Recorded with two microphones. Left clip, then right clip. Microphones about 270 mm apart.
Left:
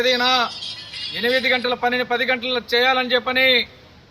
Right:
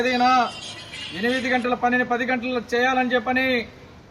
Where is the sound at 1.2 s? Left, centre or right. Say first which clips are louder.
Left 4 dB; centre.